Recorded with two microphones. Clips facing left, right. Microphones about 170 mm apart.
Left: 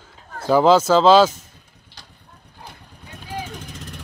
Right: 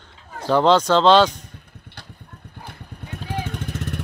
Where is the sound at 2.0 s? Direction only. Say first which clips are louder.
Right 5 dB; 60° right (ahead or behind).